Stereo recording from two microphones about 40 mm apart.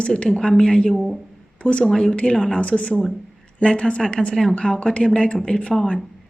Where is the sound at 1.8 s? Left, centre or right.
Centre.